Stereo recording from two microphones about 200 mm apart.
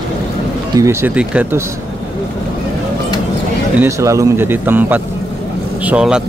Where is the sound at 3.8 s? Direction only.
15° right (ahead or behind).